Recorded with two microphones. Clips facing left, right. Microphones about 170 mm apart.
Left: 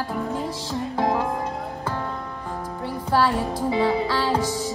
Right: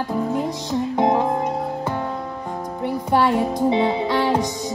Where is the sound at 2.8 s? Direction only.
20° right (ahead or behind).